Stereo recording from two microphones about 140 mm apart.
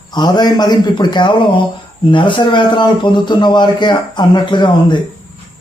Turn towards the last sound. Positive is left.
turn(degrees=35)  # may be behind; listen again after turning